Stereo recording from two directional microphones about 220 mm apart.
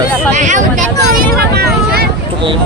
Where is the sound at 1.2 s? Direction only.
45° right (ahead or behind).